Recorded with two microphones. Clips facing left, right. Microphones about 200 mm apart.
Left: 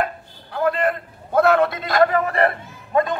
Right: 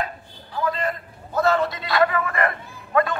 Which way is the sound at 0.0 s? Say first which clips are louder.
Left 5 dB; 60° left (ahead or behind).